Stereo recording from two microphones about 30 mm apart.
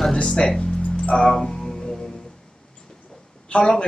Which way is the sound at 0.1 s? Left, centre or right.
Centre.